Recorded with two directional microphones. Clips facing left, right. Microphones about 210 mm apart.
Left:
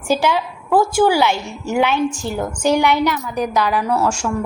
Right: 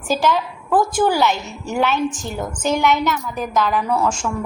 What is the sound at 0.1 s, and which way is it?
A woman's voice, 10° left (ahead or behind).